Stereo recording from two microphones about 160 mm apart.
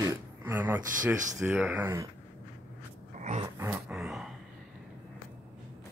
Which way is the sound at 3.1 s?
50° right (ahead or behind).